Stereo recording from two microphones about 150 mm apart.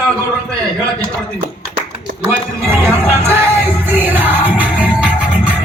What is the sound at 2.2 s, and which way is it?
Music, 15° right (ahead or behind).